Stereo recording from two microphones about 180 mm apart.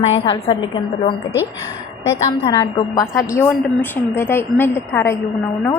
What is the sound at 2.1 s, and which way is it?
A woman's voice, 20° left (ahead or behind).